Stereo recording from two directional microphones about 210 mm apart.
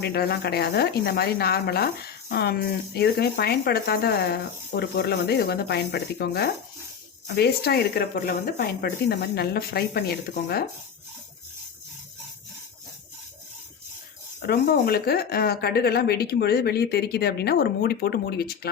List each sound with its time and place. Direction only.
0.0 s speech: 50° left (ahead or behind)
14.4 s speech: 45° left (ahead or behind)